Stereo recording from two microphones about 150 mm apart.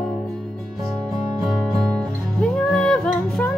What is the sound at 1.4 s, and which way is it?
Music, centre (ahead or behind).